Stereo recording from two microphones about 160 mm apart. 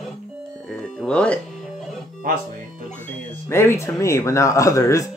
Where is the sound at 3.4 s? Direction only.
15° left (ahead or behind).